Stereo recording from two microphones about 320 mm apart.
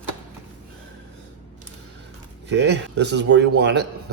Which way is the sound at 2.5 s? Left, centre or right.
Right.